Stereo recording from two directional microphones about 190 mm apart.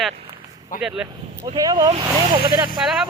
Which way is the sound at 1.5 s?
20° right (ahead or behind).